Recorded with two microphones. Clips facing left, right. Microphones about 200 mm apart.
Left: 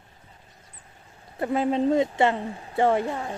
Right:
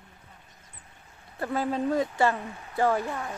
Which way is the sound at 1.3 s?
20° left (ahead or behind).